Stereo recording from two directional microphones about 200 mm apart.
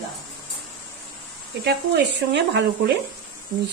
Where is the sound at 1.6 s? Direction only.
60° right (ahead or behind).